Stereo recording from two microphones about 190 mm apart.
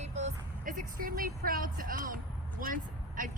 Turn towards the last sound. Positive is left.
turn(degrees=-45)  # may be behind; listen again after turning